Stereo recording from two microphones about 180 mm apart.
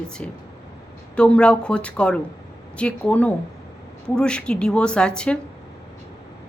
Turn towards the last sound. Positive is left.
turn(degrees=5)  # may be behind; listen again after turning